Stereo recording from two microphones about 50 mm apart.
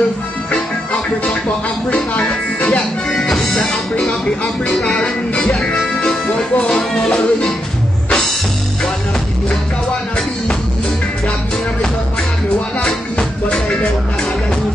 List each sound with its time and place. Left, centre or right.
2.2 s music: centre
4.6 s music: centre
6.6 s music: centre